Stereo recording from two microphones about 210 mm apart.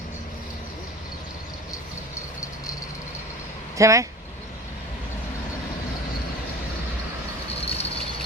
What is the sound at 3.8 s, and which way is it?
Speech, 15° right (ahead or behind).